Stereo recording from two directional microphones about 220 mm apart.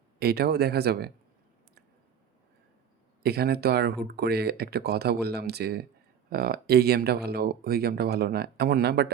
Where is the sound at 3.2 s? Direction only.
45° right (ahead or behind).